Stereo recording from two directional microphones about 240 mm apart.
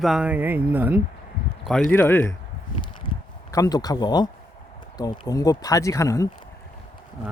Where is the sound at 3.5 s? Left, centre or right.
Centre.